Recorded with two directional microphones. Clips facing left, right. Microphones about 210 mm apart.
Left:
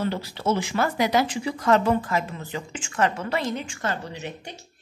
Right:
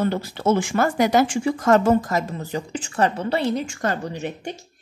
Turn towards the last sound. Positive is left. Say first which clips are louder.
# right 6 dB
turn(degrees=-45)  # may be behind; listen again after turning